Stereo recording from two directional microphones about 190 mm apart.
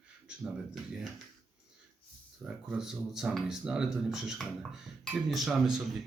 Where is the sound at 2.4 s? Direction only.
5° right (ahead or behind).